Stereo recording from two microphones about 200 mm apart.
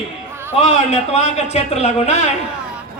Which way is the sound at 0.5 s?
30° left (ahead or behind).